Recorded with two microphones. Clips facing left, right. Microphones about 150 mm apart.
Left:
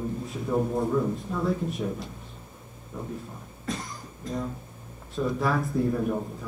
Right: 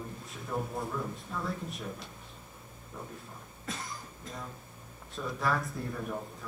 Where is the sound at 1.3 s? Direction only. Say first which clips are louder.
Left 9 dB; centre (ahead or behind).